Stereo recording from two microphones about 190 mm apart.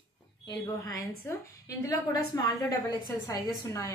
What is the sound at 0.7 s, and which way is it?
Speech, 20° left (ahead or behind).